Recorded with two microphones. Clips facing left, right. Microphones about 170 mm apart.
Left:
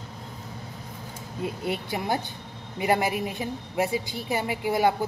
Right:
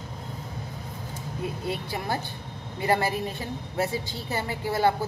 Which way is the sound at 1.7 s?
20° left (ahead or behind).